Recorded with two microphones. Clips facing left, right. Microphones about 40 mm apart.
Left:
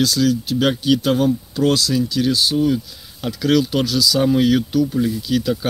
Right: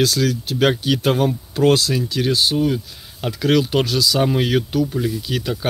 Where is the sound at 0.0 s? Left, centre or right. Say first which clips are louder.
Left 1 dB; right.